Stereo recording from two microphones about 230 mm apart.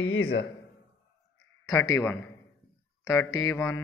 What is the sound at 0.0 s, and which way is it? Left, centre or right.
Speech, left.